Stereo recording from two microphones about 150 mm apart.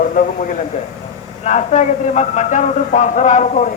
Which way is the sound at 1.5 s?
50° left (ahead or behind).